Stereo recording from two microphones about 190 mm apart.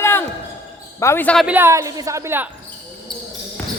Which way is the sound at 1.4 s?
10° right (ahead or behind).